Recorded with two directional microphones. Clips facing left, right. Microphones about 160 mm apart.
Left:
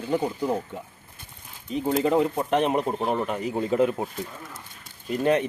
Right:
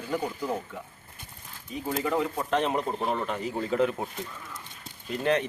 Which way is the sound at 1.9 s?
25° left (ahead or behind).